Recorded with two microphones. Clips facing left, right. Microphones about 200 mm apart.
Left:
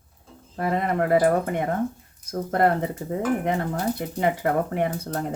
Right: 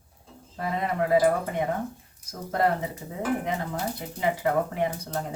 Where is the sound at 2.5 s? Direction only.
55° left (ahead or behind).